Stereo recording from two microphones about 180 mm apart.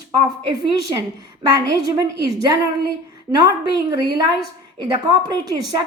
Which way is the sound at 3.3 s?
20° right (ahead or behind).